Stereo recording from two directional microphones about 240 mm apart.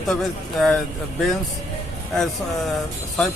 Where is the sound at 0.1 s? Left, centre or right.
Centre.